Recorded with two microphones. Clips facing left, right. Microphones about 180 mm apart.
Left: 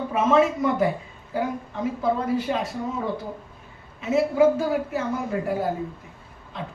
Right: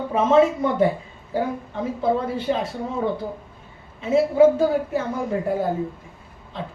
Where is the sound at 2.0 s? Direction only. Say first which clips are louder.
Right 1 dB; 30° right (ahead or behind).